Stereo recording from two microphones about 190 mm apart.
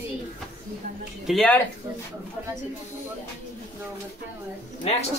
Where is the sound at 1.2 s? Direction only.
Centre (ahead or behind).